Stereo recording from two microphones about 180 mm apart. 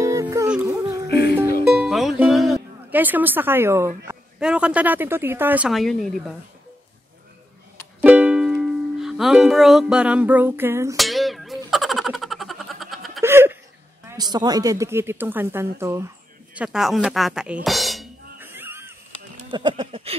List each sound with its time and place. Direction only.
0.0 s music: 15° right (ahead or behind)
1.0 s music: 65° left (ahead or behind)
1.8 s music: centre (ahead or behind)
4.4 s a woman's voice: 5° right (ahead or behind)
8.0 s speech: 5° right (ahead or behind)
11.0 s music: centre (ahead or behind)
13.2 s laughter: 15° right (ahead or behind)
14.0 s a woman's voice: 20° right (ahead or behind)
16.5 s speech: 5° right (ahead or behind)
18.4 s music: 10° right (ahead or behind)
19.5 s speech: 25° right (ahead or behind)